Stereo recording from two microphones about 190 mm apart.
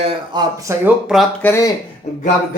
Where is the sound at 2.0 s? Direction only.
35° left (ahead or behind).